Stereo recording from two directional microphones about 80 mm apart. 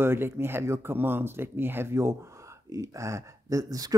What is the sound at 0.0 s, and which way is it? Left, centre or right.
Speech, right.